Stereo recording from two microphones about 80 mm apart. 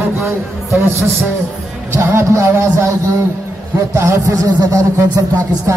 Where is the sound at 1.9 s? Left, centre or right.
Right.